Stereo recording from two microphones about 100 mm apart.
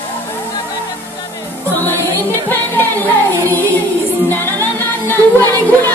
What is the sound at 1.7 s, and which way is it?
Music, 20° left (ahead or behind).